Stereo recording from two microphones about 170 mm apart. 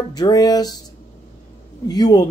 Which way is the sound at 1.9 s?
25° left (ahead or behind).